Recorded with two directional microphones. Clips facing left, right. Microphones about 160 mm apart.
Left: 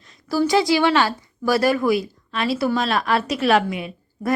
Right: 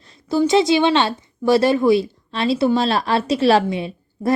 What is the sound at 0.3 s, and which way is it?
Speech, 25° right (ahead or behind).